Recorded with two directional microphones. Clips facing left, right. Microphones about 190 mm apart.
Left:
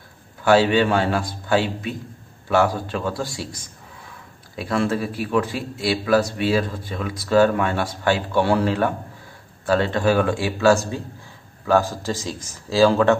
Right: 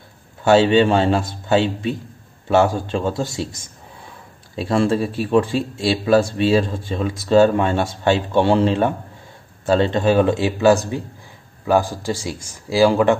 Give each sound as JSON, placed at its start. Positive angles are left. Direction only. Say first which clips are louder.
{"t": 0.4, "sound": "speech", "louder": "right 3 dB", "side_deg": -25}